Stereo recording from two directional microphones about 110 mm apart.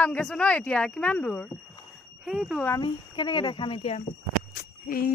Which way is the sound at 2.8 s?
45° left (ahead or behind).